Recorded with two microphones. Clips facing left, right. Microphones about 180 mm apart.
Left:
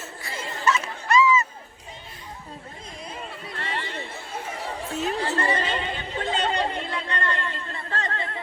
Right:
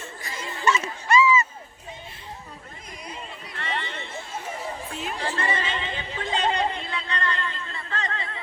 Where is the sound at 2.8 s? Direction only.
30° left (ahead or behind).